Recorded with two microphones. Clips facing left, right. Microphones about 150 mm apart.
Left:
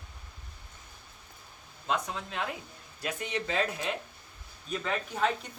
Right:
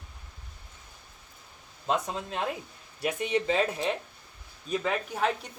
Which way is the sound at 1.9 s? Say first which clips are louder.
Right 2 dB; 25° right (ahead or behind).